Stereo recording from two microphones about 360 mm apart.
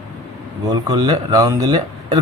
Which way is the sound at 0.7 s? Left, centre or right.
Centre.